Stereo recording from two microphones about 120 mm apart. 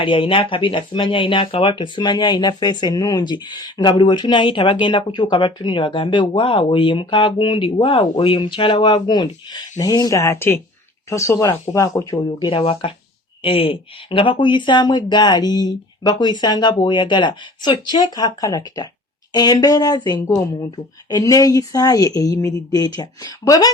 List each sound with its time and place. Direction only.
0.0 s speech: 45° left (ahead or behind); by 12.5 s 25° left (ahead or behind)
12.5 s speech: 50° left (ahead or behind); by 23.7 s 30° left (ahead or behind)